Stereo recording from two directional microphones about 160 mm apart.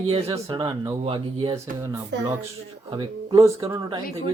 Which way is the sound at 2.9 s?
30° right (ahead or behind).